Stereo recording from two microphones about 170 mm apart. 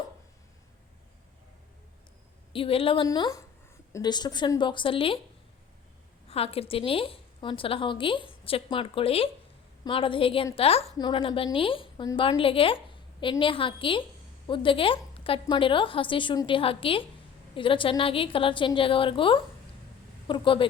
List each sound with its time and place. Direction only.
2.5 s a woman's voice: 30° left (ahead or behind)
6.2 s a woman's voice: 35° left (ahead or behind)